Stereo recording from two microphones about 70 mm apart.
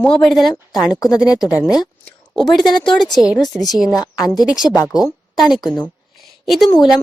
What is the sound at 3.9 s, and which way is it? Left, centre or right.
Speech, left.